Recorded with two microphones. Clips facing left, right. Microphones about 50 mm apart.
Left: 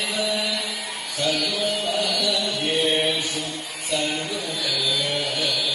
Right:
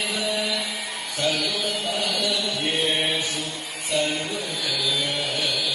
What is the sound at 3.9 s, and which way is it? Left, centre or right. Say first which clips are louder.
Music: right 1 dB; right.